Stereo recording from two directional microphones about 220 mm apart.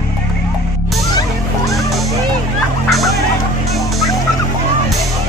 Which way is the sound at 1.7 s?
Centre (ahead or behind).